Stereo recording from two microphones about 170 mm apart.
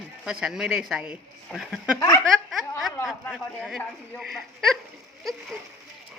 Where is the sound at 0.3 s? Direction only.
5° right (ahead or behind).